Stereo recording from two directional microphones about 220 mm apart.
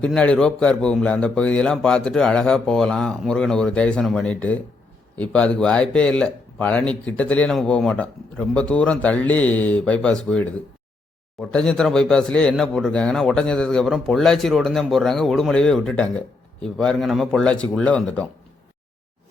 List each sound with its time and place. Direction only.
0.0 s speech: 5° left (ahead or behind)